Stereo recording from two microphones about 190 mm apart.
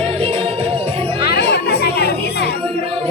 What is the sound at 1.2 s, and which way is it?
Music, 55° left (ahead or behind).